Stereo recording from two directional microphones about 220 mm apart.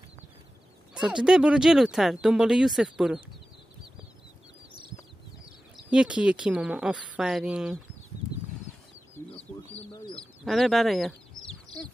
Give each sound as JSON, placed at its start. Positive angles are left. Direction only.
{"t": 0.9, "sound": "speech", "side_deg": -5}
{"t": 5.4, "sound": "speech", "side_deg": -5}
{"t": 9.5, "sound": "bird", "side_deg": 5}
{"t": 10.4, "sound": "speech", "side_deg": 0}